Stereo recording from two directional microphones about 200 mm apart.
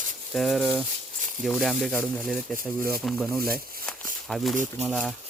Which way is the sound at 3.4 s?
45° right (ahead or behind).